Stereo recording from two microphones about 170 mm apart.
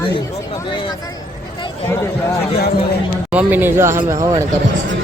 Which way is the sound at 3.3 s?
10° right (ahead or behind).